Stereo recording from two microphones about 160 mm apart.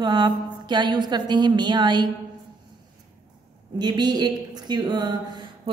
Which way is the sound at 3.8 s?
25° right (ahead or behind).